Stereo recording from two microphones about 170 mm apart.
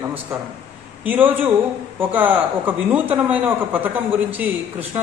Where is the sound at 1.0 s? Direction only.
10° right (ahead or behind).